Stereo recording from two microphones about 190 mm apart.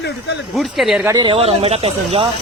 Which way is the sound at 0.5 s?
Centre (ahead or behind).